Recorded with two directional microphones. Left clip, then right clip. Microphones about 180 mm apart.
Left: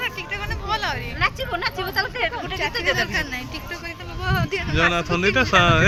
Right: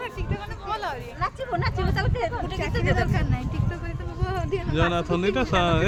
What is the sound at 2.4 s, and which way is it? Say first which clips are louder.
Speech: left 5 dB; 30° right (ahead or behind).